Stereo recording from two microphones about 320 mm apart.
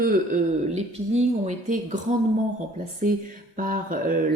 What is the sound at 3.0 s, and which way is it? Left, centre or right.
Speech, right.